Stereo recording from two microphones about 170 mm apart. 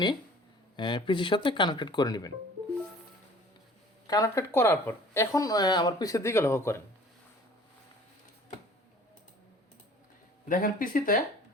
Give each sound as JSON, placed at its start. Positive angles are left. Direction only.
{"t": 0.8, "sound": "speech", "side_deg": 30}
{"t": 4.0, "sound": "speech", "side_deg": 20}
{"t": 10.5, "sound": "speech", "side_deg": 55}